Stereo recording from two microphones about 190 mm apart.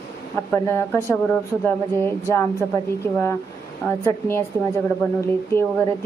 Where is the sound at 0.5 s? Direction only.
15° left (ahead or behind).